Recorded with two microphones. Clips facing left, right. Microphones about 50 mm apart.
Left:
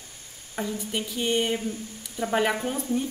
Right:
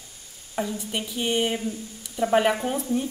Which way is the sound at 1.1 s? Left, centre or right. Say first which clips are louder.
Right 1 dB; centre.